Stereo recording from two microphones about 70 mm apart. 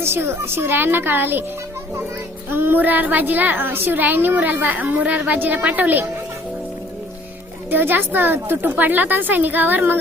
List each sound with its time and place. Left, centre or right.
0.0 s a woman's voice: right
2.5 s a woman's voice: right
7.7 s a woman's voice: right